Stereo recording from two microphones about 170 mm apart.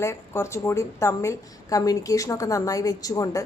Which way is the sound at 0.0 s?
15° left (ahead or behind).